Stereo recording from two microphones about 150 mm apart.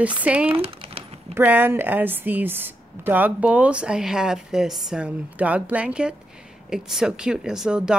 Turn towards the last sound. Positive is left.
turn(degrees=-5)  # may be behind; listen again after turning